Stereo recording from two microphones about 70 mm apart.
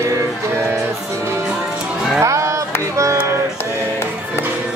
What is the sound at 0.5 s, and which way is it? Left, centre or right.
Music, right.